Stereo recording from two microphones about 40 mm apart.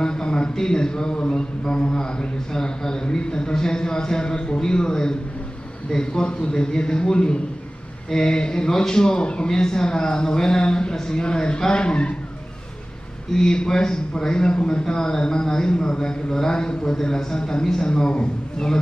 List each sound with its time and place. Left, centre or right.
0.0 s a sound: centre
1.3 s speech: left
13.3 s a man's voice: centre